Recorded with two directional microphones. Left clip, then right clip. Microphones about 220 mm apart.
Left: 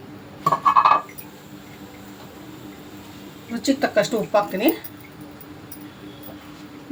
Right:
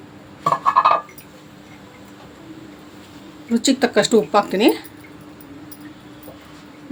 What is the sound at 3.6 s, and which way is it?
A woman's voice, 50° right (ahead or behind).